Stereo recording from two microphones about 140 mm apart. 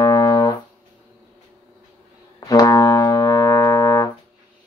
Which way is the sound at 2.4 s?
30° left (ahead or behind).